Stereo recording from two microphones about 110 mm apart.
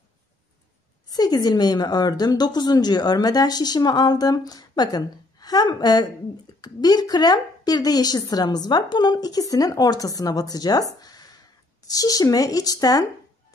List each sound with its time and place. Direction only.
1.1 s a woman's voice: 35° left (ahead or behind)
11.0 s a sound: 35° left (ahead or behind)
11.9 s a woman's voice: 35° left (ahead or behind)